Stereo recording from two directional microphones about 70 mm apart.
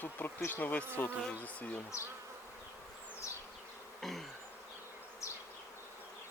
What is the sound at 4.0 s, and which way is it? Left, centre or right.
Bee, centre.